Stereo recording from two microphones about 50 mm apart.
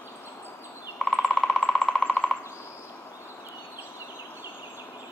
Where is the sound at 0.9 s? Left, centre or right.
Centre.